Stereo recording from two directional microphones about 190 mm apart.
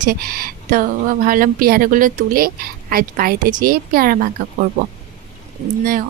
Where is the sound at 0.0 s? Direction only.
50° right (ahead or behind).